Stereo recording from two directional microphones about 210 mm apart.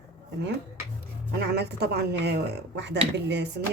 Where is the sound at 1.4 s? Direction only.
50° right (ahead or behind).